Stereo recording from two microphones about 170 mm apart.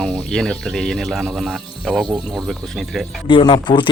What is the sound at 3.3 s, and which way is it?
Speech, 30° left (ahead or behind).